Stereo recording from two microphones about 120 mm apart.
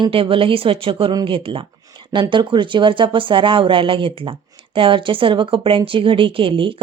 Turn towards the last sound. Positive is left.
turn(degrees=-45)  # may be behind; listen again after turning